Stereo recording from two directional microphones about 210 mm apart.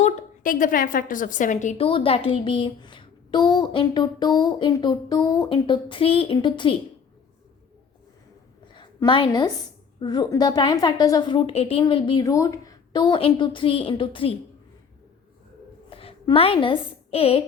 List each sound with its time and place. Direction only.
0.0 s a woman's voice: 35° left (ahead or behind)
8.7 s a sound: 20° left (ahead or behind)
10.0 s a woman's voice: 20° left (ahead or behind)
15.9 s a woman's voice: 25° left (ahead or behind)